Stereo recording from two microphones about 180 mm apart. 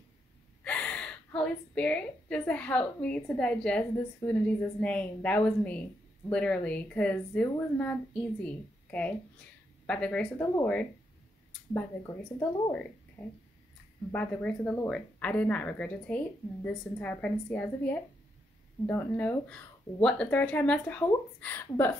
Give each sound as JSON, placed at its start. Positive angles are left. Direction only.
{"t": 0.7, "sound": "a woman's voice", "side_deg": 5}
{"t": 10.4, "sound": "speech", "side_deg": 20}
{"t": 12.4, "sound": "speech", "side_deg": 20}
{"t": 13.2, "sound": "a woman's voice", "side_deg": 5}